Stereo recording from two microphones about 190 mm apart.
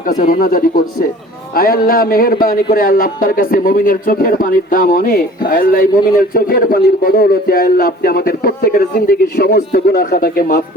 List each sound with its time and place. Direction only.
0.1 s a man's voice: 50° left (ahead or behind)